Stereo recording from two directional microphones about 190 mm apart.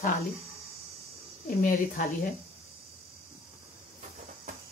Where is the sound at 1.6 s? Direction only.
45° left (ahead or behind).